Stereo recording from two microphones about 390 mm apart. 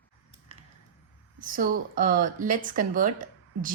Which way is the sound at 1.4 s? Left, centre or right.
Right.